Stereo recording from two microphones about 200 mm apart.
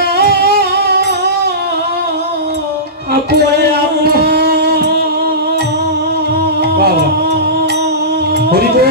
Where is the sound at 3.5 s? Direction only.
55° right (ahead or behind).